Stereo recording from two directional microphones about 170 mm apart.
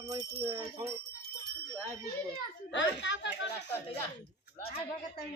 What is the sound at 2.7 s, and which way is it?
Speech, 90° left.